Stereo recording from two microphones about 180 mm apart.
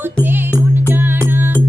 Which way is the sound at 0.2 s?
15° left (ahead or behind).